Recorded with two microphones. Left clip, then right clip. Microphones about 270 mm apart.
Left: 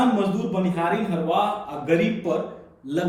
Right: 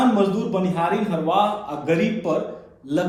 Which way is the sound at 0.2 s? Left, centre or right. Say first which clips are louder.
Right 3 dB; centre.